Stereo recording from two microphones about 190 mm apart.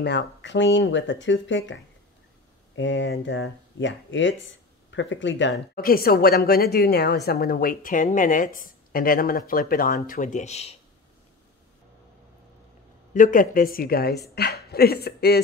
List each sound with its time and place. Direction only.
0.0 s speech: 65° left (ahead or behind)
2.7 s speech: 75° left (ahead or behind)
5.8 s a woman's voice: 50° left (ahead or behind); by 10.8 s 35° left (ahead or behind)
13.1 s a woman's voice: 45° left (ahead or behind)